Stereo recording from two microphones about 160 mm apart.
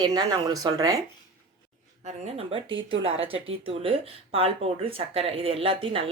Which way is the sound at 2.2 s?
40° right (ahead or behind).